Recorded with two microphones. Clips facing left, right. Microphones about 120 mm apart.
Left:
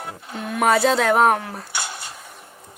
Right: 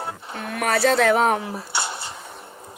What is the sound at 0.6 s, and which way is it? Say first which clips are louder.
Speech: left 4 dB; 20° left (ahead or behind).